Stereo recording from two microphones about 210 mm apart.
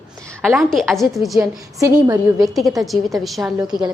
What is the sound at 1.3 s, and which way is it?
A woman's voice, 15° right (ahead or behind).